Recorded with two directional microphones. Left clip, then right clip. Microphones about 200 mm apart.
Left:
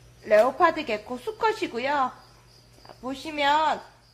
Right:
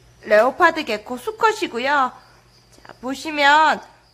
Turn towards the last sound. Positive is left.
turn(degrees=-15)  # may be behind; listen again after turning